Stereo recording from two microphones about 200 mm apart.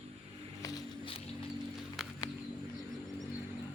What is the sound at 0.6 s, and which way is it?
Music, 20° left (ahead or behind).